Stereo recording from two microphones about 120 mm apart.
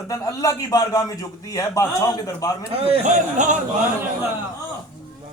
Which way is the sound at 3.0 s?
90° right.